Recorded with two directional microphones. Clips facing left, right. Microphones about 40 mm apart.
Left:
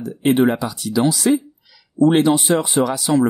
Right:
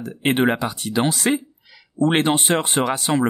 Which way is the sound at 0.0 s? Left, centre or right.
Right.